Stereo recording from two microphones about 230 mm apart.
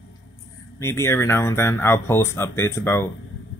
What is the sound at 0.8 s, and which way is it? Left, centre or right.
Speech, centre.